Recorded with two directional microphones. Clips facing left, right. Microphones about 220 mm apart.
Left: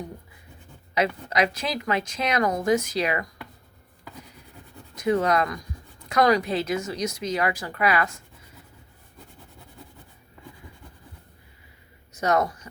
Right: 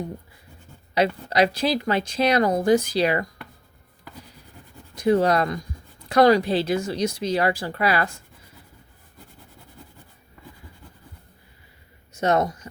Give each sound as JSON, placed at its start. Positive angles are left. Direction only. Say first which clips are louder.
{"t": 0.9, "sound": "a woman's voice", "louder": "right 4 dB", "side_deg": -30}
{"t": 4.9, "sound": "a woman's voice", "louder": "right 3 dB", "side_deg": -30}
{"t": 12.1, "sound": "speech", "louder": "right 2 dB", "side_deg": -25}